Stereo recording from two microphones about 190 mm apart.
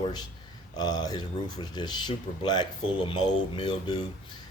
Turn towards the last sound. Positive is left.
turn(degrees=25)  # may be behind; listen again after turning